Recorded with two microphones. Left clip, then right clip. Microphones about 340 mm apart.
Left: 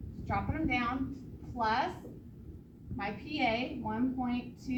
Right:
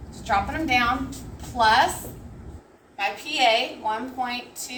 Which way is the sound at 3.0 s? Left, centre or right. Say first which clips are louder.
Right 12 dB; right.